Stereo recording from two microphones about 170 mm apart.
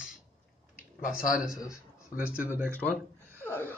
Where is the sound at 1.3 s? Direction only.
5° right (ahead or behind).